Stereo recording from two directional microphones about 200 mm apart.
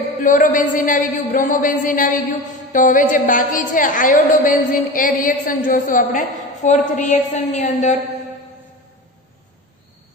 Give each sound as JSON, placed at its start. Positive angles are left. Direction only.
{"t": 0.2, "sound": "a woman's voice", "side_deg": 40}